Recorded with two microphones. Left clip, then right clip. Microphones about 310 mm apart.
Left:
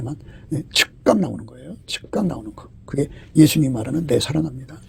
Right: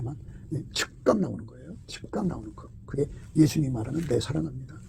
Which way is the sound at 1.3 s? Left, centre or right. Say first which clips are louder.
Left 7 dB; left.